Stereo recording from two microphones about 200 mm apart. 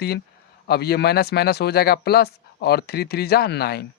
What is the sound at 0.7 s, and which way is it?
Speech, 55° left (ahead or behind).